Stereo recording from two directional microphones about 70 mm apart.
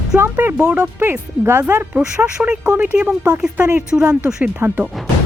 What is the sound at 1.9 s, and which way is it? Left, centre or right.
Speech, centre.